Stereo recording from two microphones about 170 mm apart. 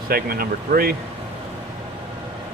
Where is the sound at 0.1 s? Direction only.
60° right (ahead or behind).